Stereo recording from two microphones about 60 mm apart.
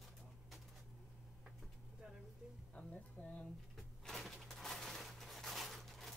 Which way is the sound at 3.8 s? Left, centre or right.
Centre.